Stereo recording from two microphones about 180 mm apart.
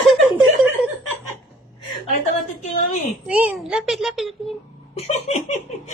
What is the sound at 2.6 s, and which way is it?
Speech, 40° left (ahead or behind).